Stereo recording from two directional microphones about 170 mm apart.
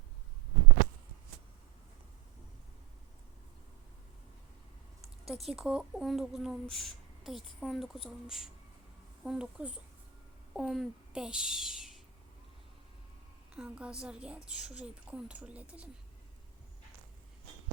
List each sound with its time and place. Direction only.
5.3 s speech: centre (ahead or behind)
13.5 s a woman's voice: 5° right (ahead or behind)